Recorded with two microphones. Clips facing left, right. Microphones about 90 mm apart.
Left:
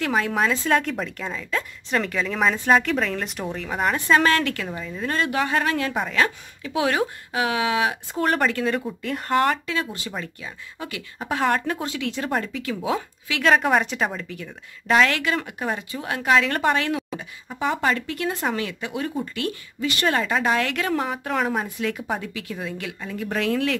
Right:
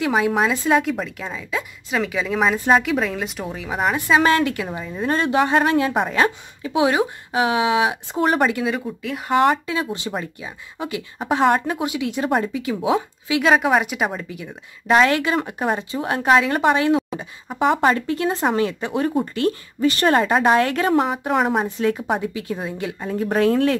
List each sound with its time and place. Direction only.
0.0 s a woman's voice: 10° right (ahead or behind)
9.7 s speech: 25° right (ahead or behind)
16.4 s speech: 15° right (ahead or behind)
17.2 s speech: 30° right (ahead or behind)
21.2 s speech: 15° right (ahead or behind)
21.7 s speech: 30° right (ahead or behind)